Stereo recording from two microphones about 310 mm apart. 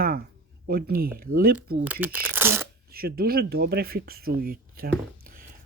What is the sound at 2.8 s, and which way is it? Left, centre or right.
Speech, right.